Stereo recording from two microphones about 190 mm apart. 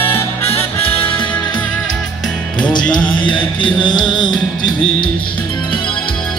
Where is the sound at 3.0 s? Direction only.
5° left (ahead or behind).